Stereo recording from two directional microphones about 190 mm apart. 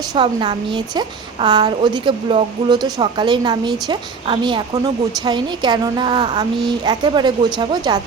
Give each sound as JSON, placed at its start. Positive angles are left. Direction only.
{"t": 0.0, "sound": "a woman's voice", "side_deg": -25}